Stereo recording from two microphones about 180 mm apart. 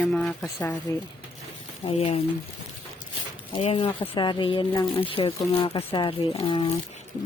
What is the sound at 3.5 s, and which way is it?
Speech, 30° left (ahead or behind).